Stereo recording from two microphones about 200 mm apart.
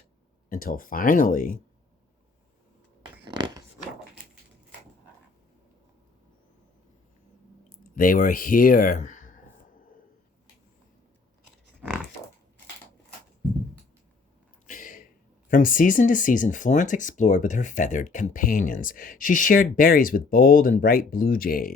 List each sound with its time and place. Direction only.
0.5 s speech: 45° left (ahead or behind)
3.2 s a sound: 25° right (ahead or behind)
7.9 s speech: 45° left (ahead or behind)
11.8 s pig: 10° right (ahead or behind)
14.7 s a sound: 40° left (ahead or behind)
15.4 s speech: 40° left (ahead or behind)